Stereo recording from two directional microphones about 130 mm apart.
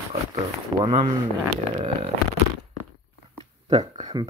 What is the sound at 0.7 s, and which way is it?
Speech, 35° right (ahead or behind).